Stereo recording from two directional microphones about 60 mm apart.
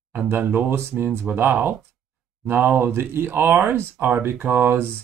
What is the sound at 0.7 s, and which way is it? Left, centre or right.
Speech, right.